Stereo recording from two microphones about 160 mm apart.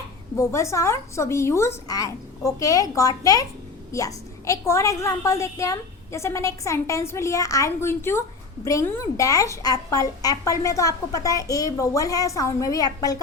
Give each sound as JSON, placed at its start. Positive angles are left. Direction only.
{"t": 0.3, "sound": "a woman's voice", "side_deg": 20}